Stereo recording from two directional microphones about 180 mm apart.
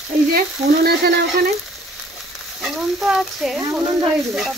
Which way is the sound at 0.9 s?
65° right (ahead or behind).